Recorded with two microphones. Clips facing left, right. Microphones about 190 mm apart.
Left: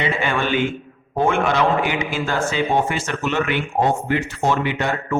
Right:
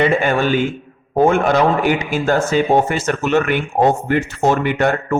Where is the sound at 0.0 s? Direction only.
45° right (ahead or behind).